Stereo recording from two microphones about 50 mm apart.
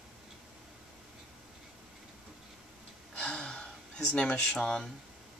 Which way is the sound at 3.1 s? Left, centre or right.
Left.